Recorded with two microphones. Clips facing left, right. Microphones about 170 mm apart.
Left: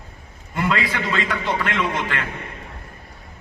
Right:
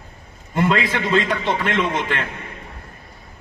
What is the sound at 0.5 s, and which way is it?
A man's voice, 25° right (ahead or behind).